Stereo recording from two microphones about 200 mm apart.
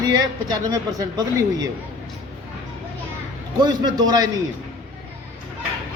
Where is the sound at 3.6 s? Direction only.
20° right (ahead or behind).